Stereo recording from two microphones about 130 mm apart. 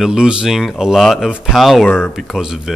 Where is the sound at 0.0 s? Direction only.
5° right (ahead or behind).